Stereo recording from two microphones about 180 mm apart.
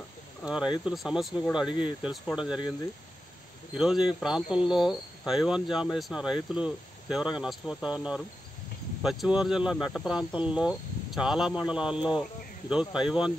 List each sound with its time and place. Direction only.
0.5 s speech: 5° right (ahead or behind)
1.7 s speech: 25° left (ahead or behind)
2.3 s speech: 5° right (ahead or behind)
3.7 s speech: 5° right (ahead or behind)